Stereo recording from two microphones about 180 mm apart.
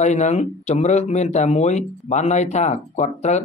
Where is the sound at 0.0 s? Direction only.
40° left (ahead or behind).